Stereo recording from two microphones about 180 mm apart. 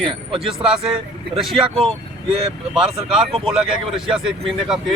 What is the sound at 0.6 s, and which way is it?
Speech, 5° right (ahead or behind).